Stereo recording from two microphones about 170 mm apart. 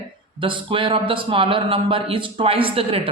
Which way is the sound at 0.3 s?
30° right (ahead or behind).